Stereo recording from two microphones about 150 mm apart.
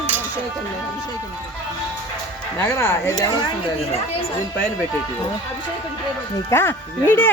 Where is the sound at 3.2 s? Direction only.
25° left (ahead or behind).